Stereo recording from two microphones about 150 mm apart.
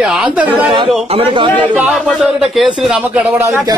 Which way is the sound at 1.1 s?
35° right (ahead or behind).